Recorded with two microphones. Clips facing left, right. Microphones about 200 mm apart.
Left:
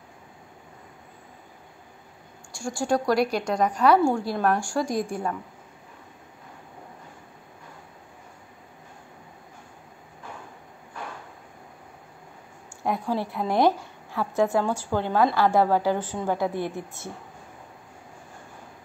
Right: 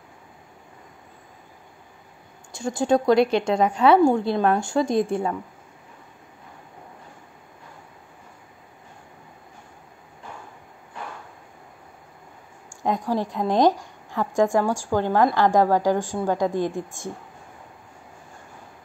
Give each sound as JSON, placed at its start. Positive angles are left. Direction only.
{"t": 2.5, "sound": "a woman's voice", "side_deg": -20}
{"t": 12.8, "sound": "a woman's voice", "side_deg": -15}